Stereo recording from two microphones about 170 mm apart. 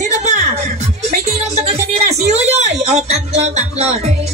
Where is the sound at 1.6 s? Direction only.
40° right (ahead or behind).